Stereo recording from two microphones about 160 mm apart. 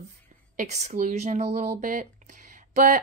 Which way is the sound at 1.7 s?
55° right (ahead or behind).